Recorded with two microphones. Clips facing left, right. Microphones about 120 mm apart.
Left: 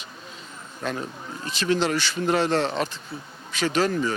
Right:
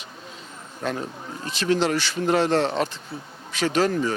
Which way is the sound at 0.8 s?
40° right (ahead or behind).